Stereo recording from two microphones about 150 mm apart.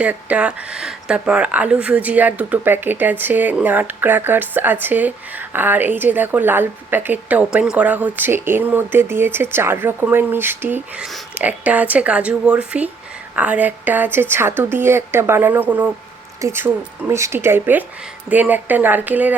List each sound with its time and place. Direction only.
0.0 s speech: 10° right (ahead or behind)